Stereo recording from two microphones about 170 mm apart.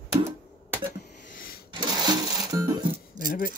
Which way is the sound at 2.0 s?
25° right (ahead or behind).